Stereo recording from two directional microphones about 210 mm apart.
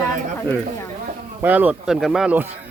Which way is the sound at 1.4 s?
10° right (ahead or behind).